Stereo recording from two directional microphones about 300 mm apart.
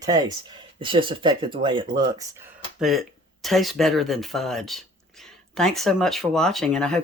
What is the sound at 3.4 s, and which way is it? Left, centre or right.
Speech, centre.